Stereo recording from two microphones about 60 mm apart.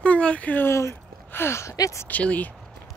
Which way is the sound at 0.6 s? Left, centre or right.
Left.